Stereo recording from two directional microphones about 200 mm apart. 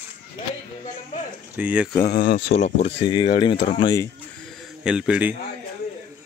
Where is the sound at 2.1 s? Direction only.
50° left (ahead or behind).